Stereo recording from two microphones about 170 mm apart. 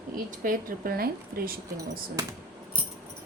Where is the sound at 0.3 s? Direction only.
55° right (ahead or behind).